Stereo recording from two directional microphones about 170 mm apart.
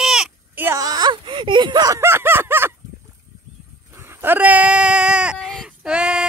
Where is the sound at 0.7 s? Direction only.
20° right (ahead or behind).